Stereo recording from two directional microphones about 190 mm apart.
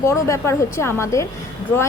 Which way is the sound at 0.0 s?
15° left (ahead or behind).